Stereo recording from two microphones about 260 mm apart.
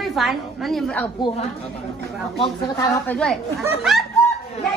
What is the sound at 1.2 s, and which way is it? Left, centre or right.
Speech, left.